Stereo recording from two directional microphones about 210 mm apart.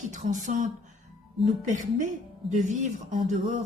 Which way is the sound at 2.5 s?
35° right (ahead or behind).